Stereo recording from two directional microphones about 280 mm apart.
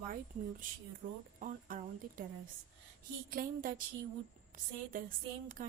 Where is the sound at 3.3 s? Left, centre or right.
Right.